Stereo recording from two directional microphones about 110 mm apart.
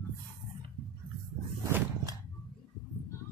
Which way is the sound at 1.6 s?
25° right (ahead or behind).